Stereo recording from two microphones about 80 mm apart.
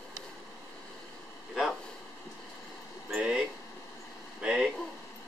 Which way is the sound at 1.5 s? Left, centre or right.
Centre.